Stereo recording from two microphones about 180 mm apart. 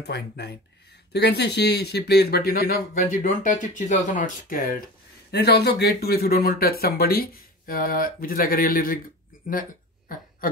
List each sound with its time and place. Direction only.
0.0 s speech: 65° left (ahead or behind); by 4.8 s 50° left (ahead or behind)
5.3 s speech: 65° left (ahead or behind)
9.5 s a sound: 50° left (ahead or behind)